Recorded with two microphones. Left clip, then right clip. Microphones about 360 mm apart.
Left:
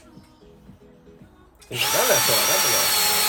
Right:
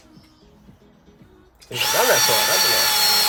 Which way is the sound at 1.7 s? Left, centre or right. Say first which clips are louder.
Right 2 dB; centre.